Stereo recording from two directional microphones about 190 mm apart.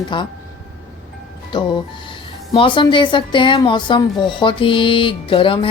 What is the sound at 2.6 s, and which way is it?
Speech, 25° left (ahead or behind).